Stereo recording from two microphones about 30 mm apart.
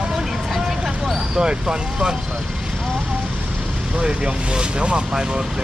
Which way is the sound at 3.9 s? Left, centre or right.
Right.